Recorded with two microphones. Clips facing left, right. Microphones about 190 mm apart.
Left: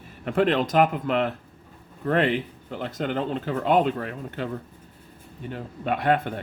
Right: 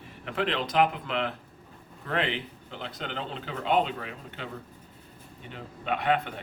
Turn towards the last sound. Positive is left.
turn(degrees=50)  # may be behind; listen again after turning